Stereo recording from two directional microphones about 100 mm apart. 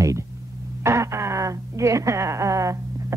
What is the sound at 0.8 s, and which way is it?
A woman's voice, 30° right (ahead or behind).